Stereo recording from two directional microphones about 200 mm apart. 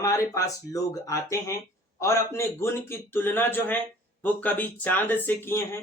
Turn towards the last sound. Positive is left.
turn(degrees=10)  # may be behind; listen again after turning